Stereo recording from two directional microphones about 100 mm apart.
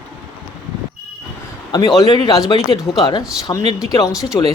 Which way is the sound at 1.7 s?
40° left (ahead or behind).